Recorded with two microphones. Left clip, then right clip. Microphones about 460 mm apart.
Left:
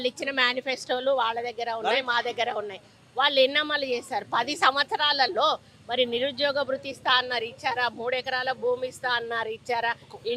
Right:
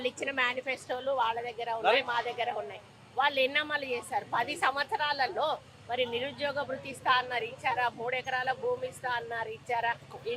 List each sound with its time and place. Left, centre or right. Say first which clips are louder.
0.0 s a woman's voice: left 5 dB; left